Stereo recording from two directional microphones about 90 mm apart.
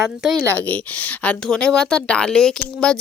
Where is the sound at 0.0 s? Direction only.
5° right (ahead or behind).